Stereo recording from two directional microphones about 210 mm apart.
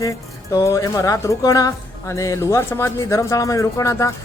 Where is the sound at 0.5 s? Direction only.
15° left (ahead or behind).